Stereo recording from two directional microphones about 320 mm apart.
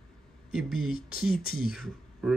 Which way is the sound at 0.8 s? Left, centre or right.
Left.